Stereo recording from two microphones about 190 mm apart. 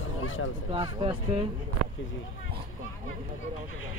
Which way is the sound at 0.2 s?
90° left.